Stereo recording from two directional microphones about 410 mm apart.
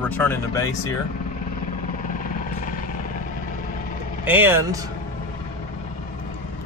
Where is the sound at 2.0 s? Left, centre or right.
Centre.